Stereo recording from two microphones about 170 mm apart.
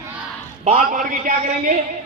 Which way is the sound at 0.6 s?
45° right (ahead or behind).